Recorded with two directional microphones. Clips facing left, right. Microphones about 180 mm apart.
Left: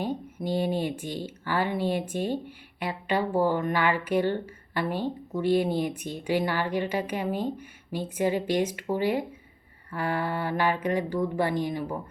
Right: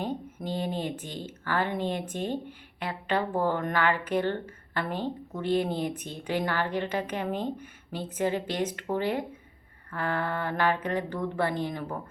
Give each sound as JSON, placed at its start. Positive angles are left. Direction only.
{"t": 0.0, "sound": "speech", "side_deg": 10}